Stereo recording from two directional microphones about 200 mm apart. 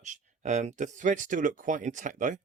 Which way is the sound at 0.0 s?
40° right (ahead or behind).